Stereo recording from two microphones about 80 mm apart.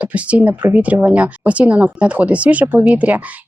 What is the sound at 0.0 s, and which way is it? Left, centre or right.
Speech, centre.